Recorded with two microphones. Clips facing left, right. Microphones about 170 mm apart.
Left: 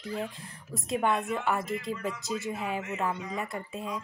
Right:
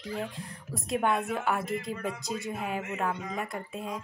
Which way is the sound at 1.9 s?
55° right (ahead or behind).